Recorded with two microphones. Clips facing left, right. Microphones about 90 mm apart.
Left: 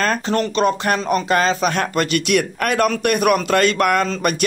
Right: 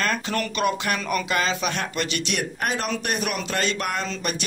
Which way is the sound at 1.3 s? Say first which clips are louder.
Left 8 dB; 45° left (ahead or behind).